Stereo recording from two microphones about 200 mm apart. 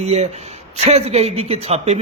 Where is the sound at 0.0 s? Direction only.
35° right (ahead or behind).